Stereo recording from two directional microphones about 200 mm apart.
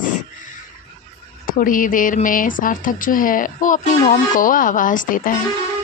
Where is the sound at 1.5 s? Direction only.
45° left (ahead or behind).